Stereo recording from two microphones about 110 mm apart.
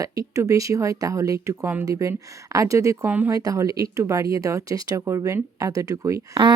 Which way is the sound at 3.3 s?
30° right (ahead or behind).